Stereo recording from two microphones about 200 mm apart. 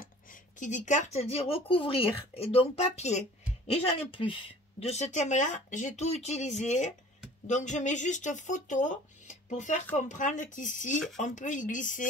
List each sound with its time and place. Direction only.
0.0 s speech: 40° left (ahead or behind)